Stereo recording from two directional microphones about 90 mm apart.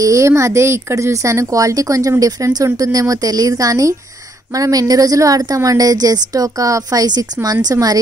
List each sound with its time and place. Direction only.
0.0 s a woman's voice: 35° right (ahead or behind)